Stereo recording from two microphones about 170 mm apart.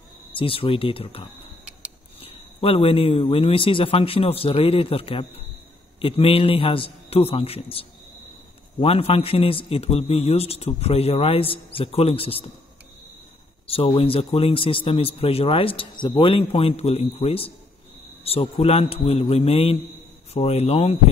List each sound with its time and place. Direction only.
0.3 s a man's voice: 30° left (ahead or behind)
2.2 s a man's voice: 35° left (ahead or behind)
13.7 s a man's voice: 35° left (ahead or behind)